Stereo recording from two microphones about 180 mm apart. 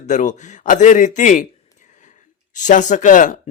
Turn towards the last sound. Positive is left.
turn(degrees=45)  # may be behind; listen again after turning